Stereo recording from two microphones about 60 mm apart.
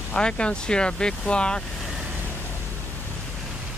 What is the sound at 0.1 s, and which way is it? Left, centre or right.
Speech, centre.